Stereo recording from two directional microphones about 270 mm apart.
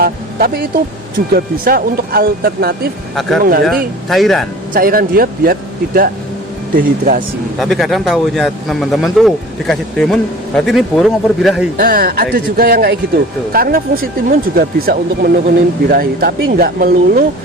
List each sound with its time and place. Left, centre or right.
0.0 s speech: right
3.6 s speech: centre
4.7 s speech: right
7.6 s speech: centre
11.8 s speech: right